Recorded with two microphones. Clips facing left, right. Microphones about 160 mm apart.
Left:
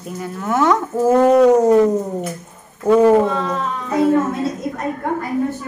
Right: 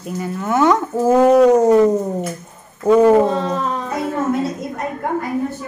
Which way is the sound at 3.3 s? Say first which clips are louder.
Right 2 dB; 35° right (ahead or behind).